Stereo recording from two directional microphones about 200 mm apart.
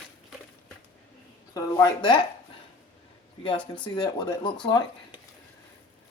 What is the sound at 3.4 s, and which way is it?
Speech, 25° left (ahead or behind).